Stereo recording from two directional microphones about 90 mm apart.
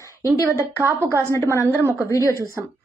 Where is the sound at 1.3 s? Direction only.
30° left (ahead or behind).